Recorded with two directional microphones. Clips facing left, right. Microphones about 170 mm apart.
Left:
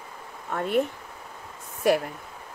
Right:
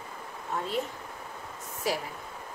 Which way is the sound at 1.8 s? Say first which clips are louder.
Left 9 dB; 60° left (ahead or behind).